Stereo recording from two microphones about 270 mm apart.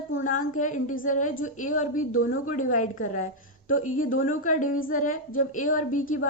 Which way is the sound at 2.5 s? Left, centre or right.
Left.